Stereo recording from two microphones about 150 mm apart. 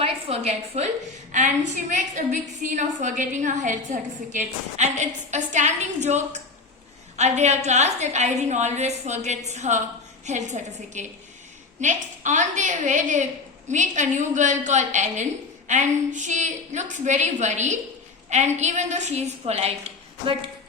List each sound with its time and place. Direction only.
0.0 s a woman's voice: 40° right (ahead or behind)
1.3 s a woman's voice: 55° right (ahead or behind)